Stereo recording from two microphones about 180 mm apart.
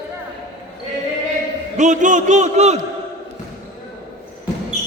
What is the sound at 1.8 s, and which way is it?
A man's voice, 45° right (ahead or behind).